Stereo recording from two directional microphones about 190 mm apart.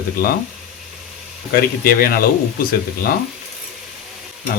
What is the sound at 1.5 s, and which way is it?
Speech, 50° left (ahead or behind).